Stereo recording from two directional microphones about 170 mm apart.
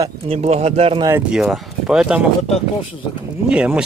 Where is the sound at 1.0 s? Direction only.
15° right (ahead or behind).